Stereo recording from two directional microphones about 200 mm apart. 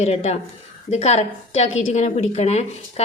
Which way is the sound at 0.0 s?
30° left (ahead or behind).